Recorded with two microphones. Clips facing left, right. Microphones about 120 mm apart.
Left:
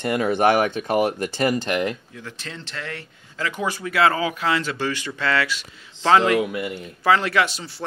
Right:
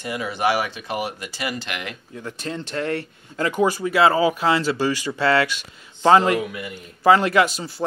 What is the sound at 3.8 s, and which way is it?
Speech, 25° right (ahead or behind).